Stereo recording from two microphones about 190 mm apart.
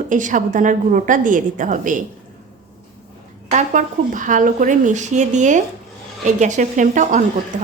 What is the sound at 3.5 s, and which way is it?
A woman's voice, 40° right (ahead or behind).